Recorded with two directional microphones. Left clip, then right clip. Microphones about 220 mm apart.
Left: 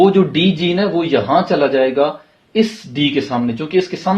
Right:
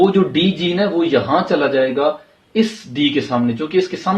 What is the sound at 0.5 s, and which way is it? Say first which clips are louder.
Speech: left 1 dB; 30° left (ahead or behind).